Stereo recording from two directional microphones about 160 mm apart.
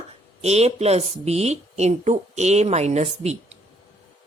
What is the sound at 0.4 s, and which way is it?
Speech, 40° right (ahead or behind).